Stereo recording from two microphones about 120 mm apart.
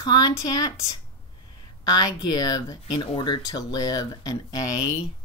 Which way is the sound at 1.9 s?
35° left (ahead or behind).